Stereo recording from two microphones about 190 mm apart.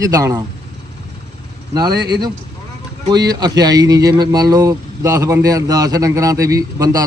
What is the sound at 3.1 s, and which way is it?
A man's voice, 20° right (ahead or behind).